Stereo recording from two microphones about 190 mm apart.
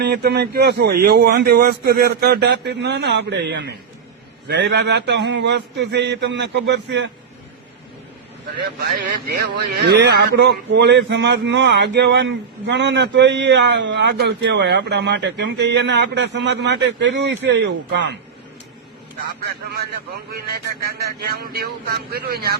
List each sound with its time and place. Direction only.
0.0 s a man's voice: 60° right (ahead or behind)
8.8 s a man's voice: 50° right (ahead or behind); by 18.2 s 65° right (ahead or behind)
20.8 s a man's voice: 55° right (ahead or behind)